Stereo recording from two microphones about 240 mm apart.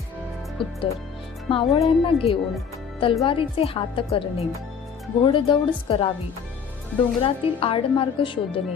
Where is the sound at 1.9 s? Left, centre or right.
Left.